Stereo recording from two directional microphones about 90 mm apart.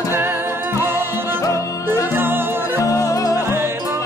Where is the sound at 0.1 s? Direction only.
25° right (ahead or behind).